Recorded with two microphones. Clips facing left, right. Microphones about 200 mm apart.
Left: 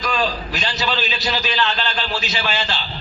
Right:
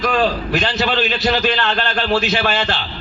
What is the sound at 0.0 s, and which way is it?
A man's voice, 55° right (ahead or behind).